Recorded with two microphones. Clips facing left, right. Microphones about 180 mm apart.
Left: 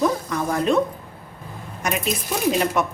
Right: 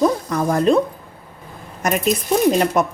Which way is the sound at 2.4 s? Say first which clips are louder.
Right 3 dB; 35° right (ahead or behind).